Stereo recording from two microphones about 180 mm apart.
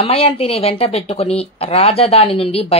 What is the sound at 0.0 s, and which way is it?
Speech, 35° left (ahead or behind).